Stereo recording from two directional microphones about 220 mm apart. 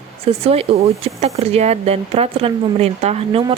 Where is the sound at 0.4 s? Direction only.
25° right (ahead or behind).